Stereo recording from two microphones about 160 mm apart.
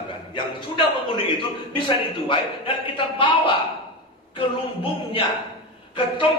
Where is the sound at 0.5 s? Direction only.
30° left (ahead or behind).